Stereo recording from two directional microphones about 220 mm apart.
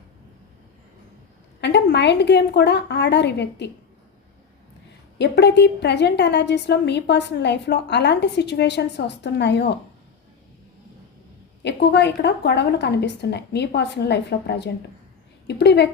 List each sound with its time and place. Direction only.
1.6 s a woman's voice: 50° left (ahead or behind)
5.1 s a woman's voice: 50° left (ahead or behind)
11.6 s a woman's voice: 50° left (ahead or behind)